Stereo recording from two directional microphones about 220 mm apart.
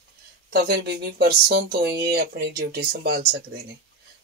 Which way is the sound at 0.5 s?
45° right (ahead or behind).